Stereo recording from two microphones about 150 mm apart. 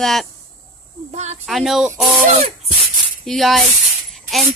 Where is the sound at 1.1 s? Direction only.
50° right (ahead or behind).